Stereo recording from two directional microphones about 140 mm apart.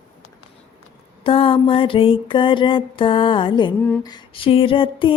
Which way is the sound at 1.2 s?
40° left (ahead or behind).